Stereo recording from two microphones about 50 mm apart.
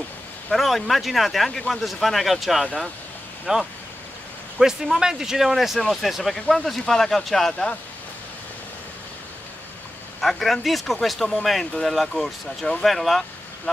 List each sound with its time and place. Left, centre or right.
0.5 s speech: centre
3.5 s a man's voice: centre
4.6 s a man's voice: centre
10.2 s speech: centre